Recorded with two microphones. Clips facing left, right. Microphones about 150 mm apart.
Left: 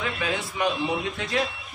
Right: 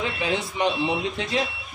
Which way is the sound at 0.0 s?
20° right (ahead or behind).